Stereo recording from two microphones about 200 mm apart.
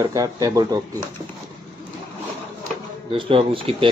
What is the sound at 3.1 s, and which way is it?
Speech, 25° right (ahead or behind).